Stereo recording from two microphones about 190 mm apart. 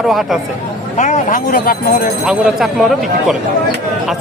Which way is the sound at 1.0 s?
40° left (ahead or behind).